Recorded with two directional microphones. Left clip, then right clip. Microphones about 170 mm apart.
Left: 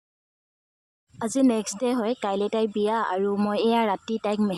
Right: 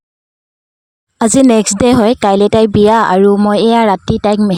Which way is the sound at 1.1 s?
60° right (ahead or behind).